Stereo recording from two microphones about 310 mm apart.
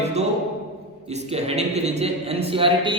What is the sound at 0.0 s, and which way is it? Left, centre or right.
Music, right.